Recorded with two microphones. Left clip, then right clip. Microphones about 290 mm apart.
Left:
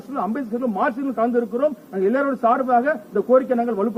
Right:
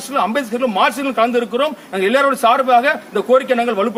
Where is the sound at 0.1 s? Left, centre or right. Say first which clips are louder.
Right 8 dB; centre.